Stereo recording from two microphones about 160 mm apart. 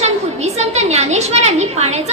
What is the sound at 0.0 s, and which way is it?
A woman's voice, 40° right (ahead or behind).